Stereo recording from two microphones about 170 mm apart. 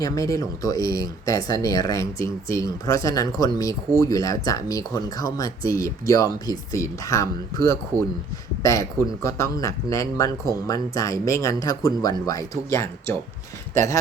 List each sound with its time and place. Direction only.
0.0 s speech: 20° left (ahead or behind)